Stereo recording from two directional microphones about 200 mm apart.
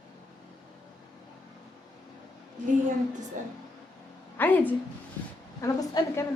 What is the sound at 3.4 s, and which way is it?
Speech, 40° right (ahead or behind).